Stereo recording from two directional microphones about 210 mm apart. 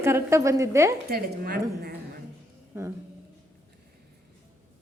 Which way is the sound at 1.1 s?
45° right (ahead or behind).